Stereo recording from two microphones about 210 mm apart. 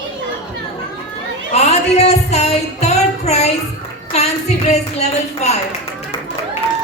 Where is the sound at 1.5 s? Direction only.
30° left (ahead or behind).